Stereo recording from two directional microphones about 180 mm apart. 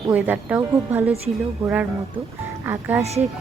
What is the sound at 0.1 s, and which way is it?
Speech, 10° right (ahead or behind).